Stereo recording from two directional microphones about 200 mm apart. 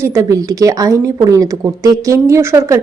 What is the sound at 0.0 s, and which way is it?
A woman's voice, 15° right (ahead or behind).